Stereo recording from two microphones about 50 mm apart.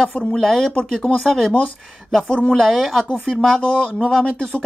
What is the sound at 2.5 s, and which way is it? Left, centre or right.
Speech, centre.